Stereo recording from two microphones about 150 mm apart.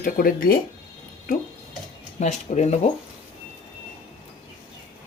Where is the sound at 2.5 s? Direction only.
50° left (ahead or behind).